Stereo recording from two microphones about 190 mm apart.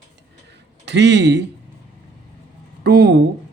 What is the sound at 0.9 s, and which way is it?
Speech, 65° right (ahead or behind).